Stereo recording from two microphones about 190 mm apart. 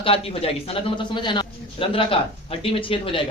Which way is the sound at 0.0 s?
30° left (ahead or behind).